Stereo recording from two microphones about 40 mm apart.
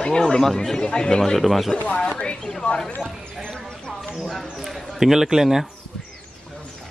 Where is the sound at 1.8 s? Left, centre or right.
Left.